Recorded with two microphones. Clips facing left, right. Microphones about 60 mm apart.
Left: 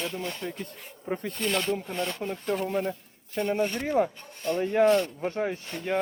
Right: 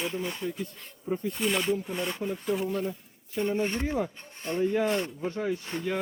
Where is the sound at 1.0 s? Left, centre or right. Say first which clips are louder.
Right 1 dB; left.